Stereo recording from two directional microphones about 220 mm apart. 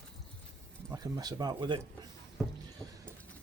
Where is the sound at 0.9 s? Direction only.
15° right (ahead or behind).